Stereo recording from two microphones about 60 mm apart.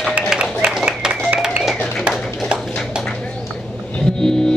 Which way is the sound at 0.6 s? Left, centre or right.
Centre.